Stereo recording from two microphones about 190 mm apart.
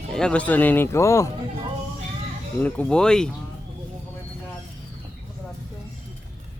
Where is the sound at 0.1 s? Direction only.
5° left (ahead or behind).